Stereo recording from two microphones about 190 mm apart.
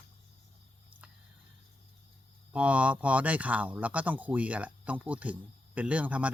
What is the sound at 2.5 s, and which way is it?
Speech, 5° right (ahead or behind).